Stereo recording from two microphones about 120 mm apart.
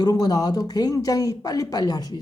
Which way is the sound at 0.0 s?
35° left (ahead or behind).